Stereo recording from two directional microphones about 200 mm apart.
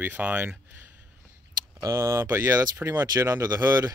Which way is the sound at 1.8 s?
15° right (ahead or behind).